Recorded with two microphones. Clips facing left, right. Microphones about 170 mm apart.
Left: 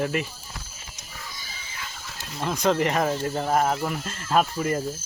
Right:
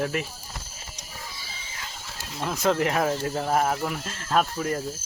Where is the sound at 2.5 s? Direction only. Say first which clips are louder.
Left 1 dB; centre (ahead or behind).